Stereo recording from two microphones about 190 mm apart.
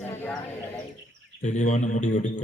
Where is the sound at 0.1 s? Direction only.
10° left (ahead or behind).